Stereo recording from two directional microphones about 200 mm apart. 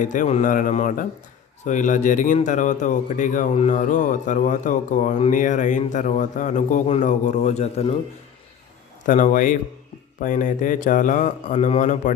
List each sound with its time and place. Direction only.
0.0 s speech: 40° left (ahead or behind)
9.0 s speech: 40° left (ahead or behind)